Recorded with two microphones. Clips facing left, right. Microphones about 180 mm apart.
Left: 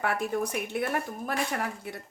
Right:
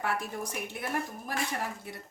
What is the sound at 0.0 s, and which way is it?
A woman's voice, 60° left (ahead or behind).